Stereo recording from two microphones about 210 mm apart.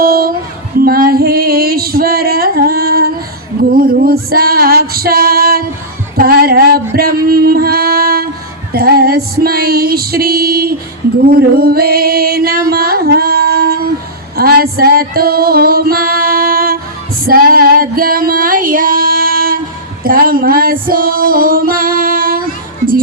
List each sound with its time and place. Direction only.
0.0 s music: 45° right (ahead or behind)
0.9 s female singing: 45° right (ahead or behind)
3.6 s music: 45° right (ahead or behind)
17.2 s female singing: 45° right (ahead or behind)
20.1 s music: 45° right (ahead or behind)